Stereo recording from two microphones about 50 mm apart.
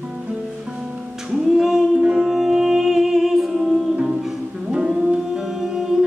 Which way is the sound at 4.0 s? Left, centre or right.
Centre.